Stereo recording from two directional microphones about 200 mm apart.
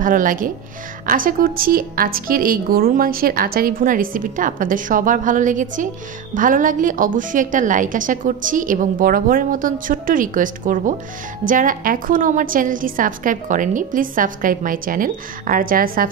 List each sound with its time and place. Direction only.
0.0 s a woman's voice: 40° right (ahead or behind)